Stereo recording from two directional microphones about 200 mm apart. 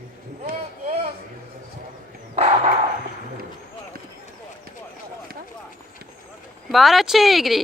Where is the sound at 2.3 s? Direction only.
30° right (ahead or behind).